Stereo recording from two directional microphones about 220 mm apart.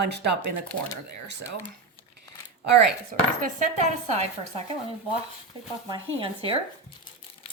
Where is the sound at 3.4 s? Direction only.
35° right (ahead or behind).